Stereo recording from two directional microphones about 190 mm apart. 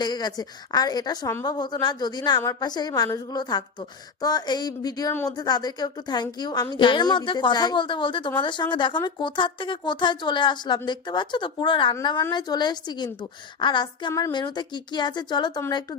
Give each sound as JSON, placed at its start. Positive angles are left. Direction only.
{"t": 0.0, "sound": "speech", "side_deg": 20}